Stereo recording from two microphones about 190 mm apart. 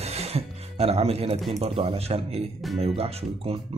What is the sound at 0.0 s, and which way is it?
Music, 35° right (ahead or behind).